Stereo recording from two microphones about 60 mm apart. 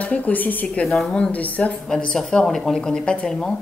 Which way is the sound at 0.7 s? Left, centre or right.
Centre.